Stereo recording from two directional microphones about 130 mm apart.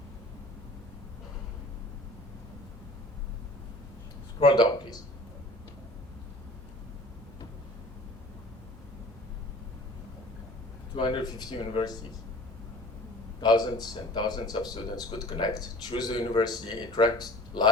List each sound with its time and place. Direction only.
4.4 s speech: 35° left (ahead or behind)
10.9 s speech: 40° left (ahead or behind)
13.4 s speech: 35° left (ahead or behind)